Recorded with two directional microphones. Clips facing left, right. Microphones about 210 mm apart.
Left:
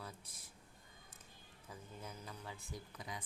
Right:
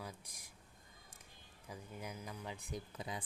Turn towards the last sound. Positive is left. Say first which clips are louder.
# right 4 dB
turn(degrees=-30)  # may be behind; listen again after turning